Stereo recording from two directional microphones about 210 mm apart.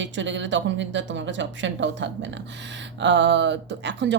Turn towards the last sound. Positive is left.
turn(degrees=-55)  # may be behind; listen again after turning